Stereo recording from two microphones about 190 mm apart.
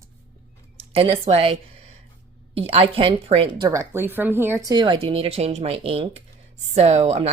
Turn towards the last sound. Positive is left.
turn(degrees=-35)  # may be behind; listen again after turning